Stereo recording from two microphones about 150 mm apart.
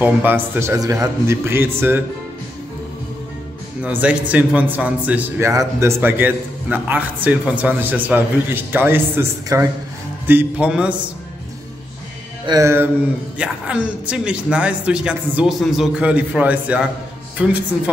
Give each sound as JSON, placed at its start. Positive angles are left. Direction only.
{"t": 0.0, "sound": "a man's voice", "side_deg": -10}
{"t": 3.8, "sound": "a man's voice", "side_deg": -10}
{"t": 12.4, "sound": "music", "side_deg": -20}
{"t": 13.4, "sound": "a man's voice", "side_deg": -10}